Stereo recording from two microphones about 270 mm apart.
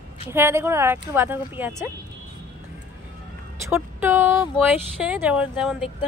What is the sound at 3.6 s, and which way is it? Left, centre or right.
Speech, centre.